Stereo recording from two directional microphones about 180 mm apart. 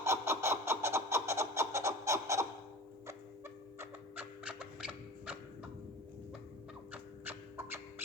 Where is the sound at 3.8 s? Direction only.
10° right (ahead or behind).